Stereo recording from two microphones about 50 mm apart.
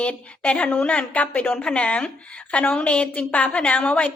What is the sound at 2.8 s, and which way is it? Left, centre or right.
A woman's voice, left.